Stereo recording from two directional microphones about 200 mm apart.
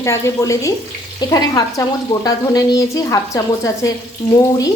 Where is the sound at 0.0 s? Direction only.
15° left (ahead or behind).